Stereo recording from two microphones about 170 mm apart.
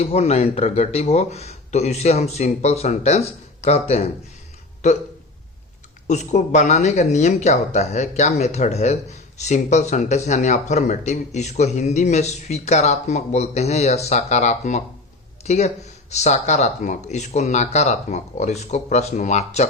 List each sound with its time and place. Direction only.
0.0 s speech: 40° left (ahead or behind)
6.1 s speech: 45° left (ahead or behind)